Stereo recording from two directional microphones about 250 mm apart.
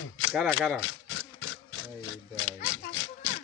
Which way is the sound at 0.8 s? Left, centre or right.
Left.